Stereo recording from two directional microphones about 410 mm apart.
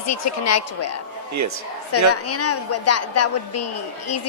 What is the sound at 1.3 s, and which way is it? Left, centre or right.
Speech, right.